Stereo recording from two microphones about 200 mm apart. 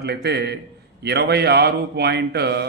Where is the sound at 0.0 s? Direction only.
55° right (ahead or behind).